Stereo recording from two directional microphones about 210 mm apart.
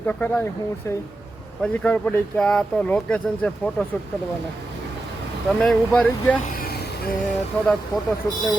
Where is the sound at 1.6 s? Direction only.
5° left (ahead or behind).